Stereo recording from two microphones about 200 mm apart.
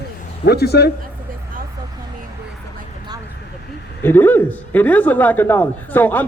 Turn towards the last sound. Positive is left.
turn(degrees=10)  # may be behind; listen again after turning